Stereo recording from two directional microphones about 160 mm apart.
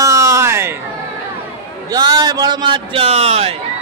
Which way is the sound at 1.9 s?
25° right (ahead or behind).